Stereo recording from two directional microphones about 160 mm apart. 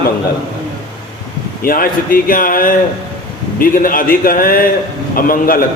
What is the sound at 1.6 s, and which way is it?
A man's voice, 65° left (ahead or behind).